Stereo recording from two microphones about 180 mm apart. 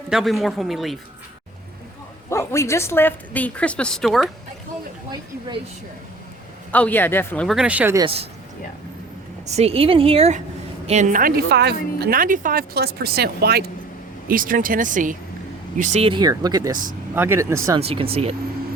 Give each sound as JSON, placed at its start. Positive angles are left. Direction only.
{"t": 0.1, "sound": "speech", "side_deg": 0}
{"t": 2.3, "sound": "a woman's voice", "side_deg": 15}
{"t": 6.7, "sound": "a woman's voice", "side_deg": 10}
{"t": 7.4, "sound": "speech", "side_deg": -5}
{"t": 7.9, "sound": "a woman's voice", "side_deg": -30}
{"t": 9.6, "sound": "a woman's voice", "side_deg": -30}
{"t": 14.3, "sound": "speech", "side_deg": -50}
{"t": 17.7, "sound": "a woman's voice", "side_deg": -30}